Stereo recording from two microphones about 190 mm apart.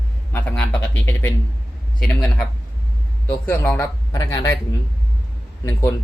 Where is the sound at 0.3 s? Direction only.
5° left (ahead or behind).